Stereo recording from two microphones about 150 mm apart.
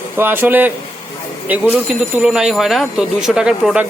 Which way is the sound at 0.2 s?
15° right (ahead or behind).